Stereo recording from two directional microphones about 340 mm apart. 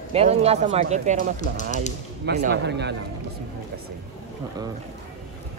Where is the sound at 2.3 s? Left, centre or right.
Right.